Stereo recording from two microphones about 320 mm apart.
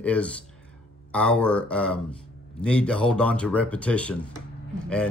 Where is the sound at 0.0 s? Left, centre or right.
Centre.